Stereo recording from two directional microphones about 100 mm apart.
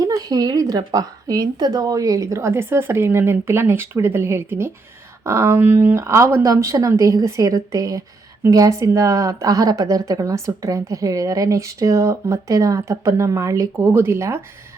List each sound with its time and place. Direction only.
0.0 s a woman's voice: 40° right (ahead or behind)